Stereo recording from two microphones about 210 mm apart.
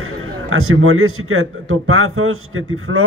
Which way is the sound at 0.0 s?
80° right.